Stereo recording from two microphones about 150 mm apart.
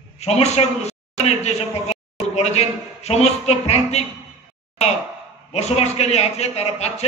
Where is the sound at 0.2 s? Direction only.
45° left (ahead or behind).